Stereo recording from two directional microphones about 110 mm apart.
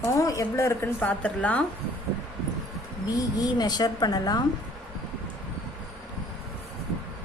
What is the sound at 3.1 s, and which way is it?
A woman's voice, 35° left (ahead or behind).